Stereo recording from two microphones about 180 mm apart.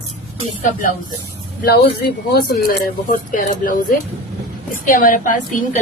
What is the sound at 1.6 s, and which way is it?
Speech, 60° left (ahead or behind).